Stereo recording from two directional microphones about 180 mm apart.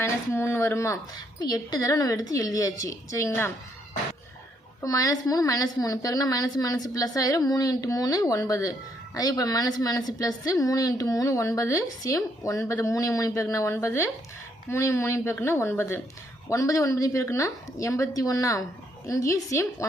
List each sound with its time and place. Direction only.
0.0 s a woman's voice: 15° left (ahead or behind)
4.8 s a woman's voice: 20° left (ahead or behind)